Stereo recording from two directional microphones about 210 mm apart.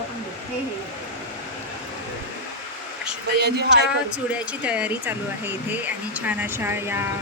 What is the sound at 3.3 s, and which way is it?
Speech, 50° right (ahead or behind).